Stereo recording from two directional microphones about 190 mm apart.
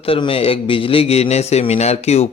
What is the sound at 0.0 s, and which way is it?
A man's voice, 30° left (ahead or behind).